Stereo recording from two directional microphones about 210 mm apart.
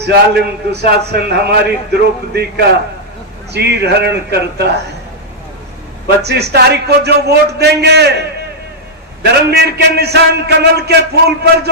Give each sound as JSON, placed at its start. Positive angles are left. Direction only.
{"t": 0.0, "sound": "a man's voice", "side_deg": -50}
{"t": 6.2, "sound": "a man's voice", "side_deg": -50}
{"t": 9.5, "sound": "a man's voice", "side_deg": -50}